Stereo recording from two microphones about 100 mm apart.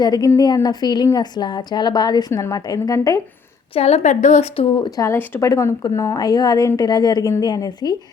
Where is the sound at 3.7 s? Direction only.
90° left; by 4.8 s 70° left (ahead or behind).